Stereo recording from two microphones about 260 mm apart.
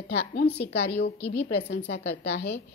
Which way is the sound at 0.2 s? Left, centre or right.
Left.